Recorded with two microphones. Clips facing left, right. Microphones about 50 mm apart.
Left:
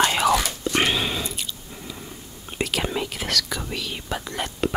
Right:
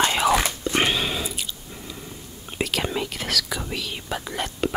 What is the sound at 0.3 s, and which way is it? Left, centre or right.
Whispering, right.